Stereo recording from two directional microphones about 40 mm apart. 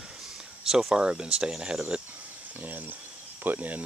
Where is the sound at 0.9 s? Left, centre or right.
Right.